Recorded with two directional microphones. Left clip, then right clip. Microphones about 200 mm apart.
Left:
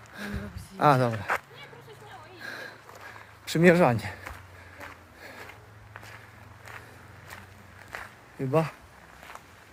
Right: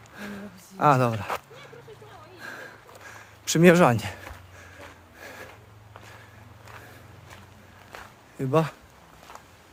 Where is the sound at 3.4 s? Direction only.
25° right (ahead or behind).